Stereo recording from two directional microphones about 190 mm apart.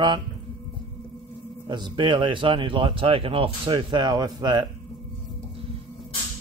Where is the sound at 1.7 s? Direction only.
25° right (ahead or behind).